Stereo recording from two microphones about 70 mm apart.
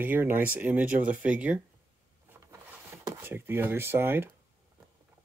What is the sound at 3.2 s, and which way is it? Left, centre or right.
Speech, right.